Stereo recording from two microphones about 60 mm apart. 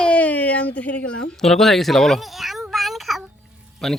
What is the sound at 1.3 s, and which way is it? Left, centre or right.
Speech, centre.